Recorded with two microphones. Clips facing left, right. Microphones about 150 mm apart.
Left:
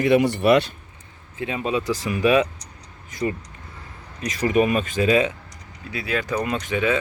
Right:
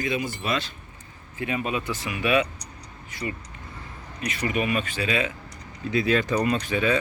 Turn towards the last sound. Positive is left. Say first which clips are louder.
# left 1 dB
turn(degrees=20)  # may be behind; listen again after turning